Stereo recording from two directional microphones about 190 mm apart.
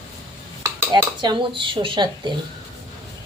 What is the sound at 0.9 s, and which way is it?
Speech, 20° right (ahead or behind).